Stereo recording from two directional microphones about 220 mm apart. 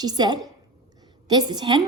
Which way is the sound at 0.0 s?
20° right (ahead or behind).